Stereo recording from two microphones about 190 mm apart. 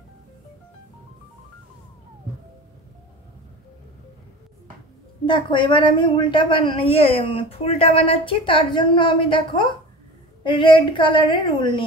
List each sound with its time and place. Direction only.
5.2 s a woman's voice: 25° left (ahead or behind)